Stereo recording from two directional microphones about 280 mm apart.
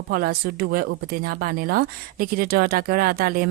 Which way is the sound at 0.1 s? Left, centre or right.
Right.